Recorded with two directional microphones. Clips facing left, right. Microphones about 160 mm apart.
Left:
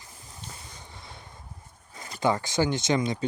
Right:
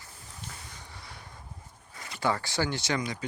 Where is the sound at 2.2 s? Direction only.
20° left (ahead or behind).